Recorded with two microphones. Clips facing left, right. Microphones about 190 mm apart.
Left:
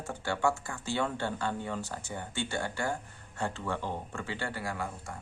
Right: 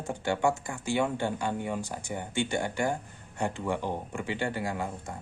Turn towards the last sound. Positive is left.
turn(degrees=-20)  # may be behind; listen again after turning